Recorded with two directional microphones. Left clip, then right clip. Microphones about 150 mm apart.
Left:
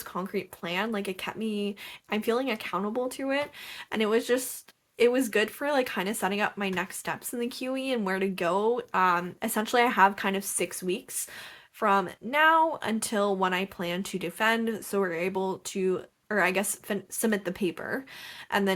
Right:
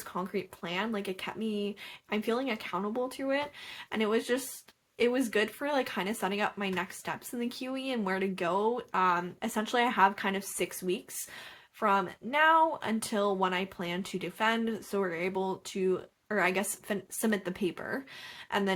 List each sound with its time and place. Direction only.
0.1 s speech: 25° left (ahead or behind)